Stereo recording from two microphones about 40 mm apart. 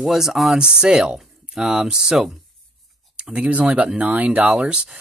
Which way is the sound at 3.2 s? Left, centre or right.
Right.